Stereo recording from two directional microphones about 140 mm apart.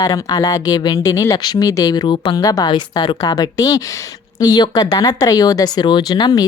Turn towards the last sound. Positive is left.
turn(degrees=30)  # may be behind; listen again after turning